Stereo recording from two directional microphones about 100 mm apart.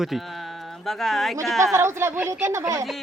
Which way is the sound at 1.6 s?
30° right (ahead or behind).